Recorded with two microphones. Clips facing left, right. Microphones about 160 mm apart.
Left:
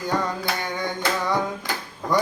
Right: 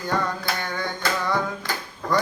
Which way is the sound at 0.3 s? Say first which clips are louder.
Left 1 dB; 15° left (ahead or behind).